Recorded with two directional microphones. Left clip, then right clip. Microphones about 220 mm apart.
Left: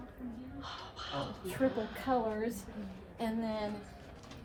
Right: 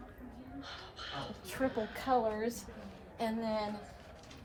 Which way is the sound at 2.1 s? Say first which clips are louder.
Right 2 dB; 25° right (ahead or behind).